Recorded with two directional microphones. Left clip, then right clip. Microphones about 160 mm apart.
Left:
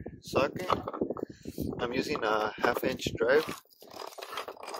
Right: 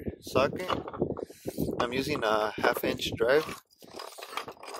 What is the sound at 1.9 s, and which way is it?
Speech, 30° right (ahead or behind).